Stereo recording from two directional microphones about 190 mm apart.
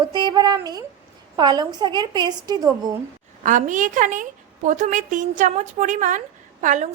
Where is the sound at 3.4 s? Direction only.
40° right (ahead or behind).